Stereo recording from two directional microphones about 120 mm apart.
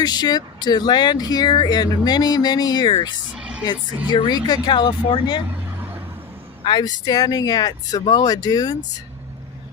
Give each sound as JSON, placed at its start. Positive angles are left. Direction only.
{"t": 0.0, "sound": "speech", "side_deg": 35}
{"t": 3.3, "sound": "music", "side_deg": -10}
{"t": 4.1, "sound": "speech", "side_deg": 40}
{"t": 5.5, "sound": "vehicle", "side_deg": -15}
{"t": 6.7, "sound": "speech", "side_deg": 35}